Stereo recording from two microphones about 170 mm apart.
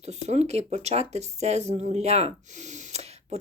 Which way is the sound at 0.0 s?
40° right (ahead or behind).